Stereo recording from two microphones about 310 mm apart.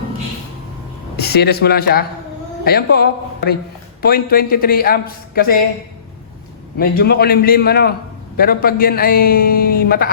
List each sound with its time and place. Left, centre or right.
1.1 s a man's voice: left
6.7 s a man's voice: left